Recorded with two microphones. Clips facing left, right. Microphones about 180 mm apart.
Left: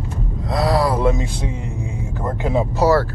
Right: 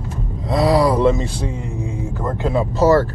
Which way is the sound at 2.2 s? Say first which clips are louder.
Even; 20° left (ahead or behind).